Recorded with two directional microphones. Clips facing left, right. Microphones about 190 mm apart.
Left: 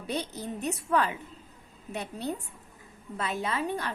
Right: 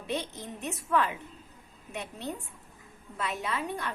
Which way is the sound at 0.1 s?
35° left (ahead or behind).